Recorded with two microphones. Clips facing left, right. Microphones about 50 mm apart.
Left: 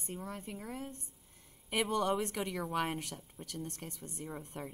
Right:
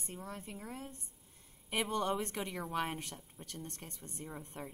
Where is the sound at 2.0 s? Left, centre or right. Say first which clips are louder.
Left 3 dB; left.